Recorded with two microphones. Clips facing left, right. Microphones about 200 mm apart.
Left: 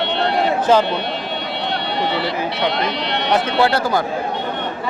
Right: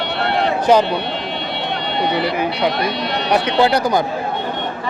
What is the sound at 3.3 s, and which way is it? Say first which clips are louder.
Speech: right 2 dB; 15° right (ahead or behind).